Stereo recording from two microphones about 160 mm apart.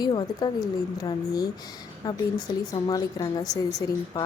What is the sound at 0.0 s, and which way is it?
Speech, 25° left (ahead or behind).